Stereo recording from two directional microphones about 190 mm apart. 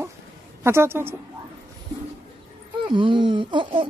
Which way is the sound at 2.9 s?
25° right (ahead or behind).